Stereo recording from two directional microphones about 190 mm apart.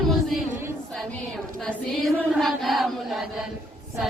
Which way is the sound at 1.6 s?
Centre (ahead or behind).